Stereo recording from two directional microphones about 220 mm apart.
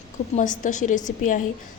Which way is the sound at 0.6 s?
35° left (ahead or behind).